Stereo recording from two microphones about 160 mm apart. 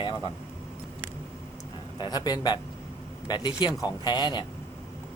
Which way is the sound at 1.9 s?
25° left (ahead or behind).